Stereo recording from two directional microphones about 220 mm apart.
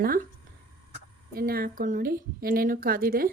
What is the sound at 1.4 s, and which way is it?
Speech, 40° right (ahead or behind).